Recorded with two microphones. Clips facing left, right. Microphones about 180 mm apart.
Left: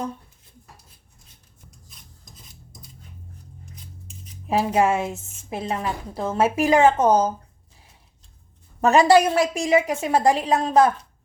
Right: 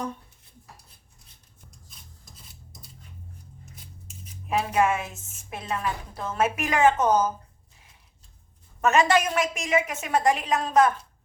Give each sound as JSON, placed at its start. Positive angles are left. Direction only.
{"t": 4.4, "sound": "a woman's voice", "side_deg": 30}
{"t": 8.8, "sound": "a woman's voice", "side_deg": 35}